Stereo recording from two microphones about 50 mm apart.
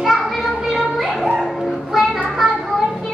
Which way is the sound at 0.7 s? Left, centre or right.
Centre.